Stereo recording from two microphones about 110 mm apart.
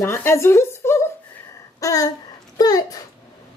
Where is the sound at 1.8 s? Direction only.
35° left (ahead or behind).